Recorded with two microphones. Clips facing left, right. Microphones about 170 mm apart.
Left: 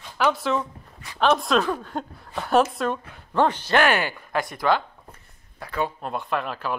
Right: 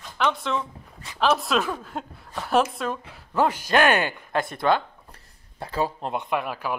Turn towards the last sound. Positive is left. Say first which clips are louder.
# even
turn(degrees=-10)  # may be behind; listen again after turning